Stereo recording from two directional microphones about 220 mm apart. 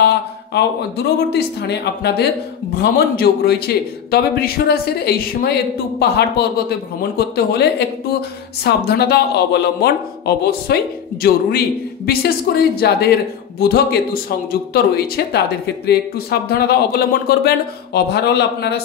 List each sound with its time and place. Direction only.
0.6 s a man's voice: 50° left (ahead or behind)
8.6 s a man's voice: 45° left (ahead or behind)